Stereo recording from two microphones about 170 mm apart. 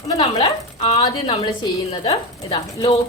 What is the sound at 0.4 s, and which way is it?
A woman's voice, 40° left (ahead or behind).